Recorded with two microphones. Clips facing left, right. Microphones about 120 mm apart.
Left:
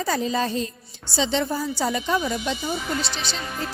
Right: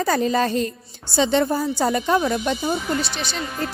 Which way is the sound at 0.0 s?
60° right (ahead or behind).